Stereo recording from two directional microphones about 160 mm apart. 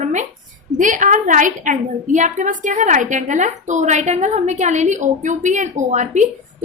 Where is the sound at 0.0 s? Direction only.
50° right (ahead or behind).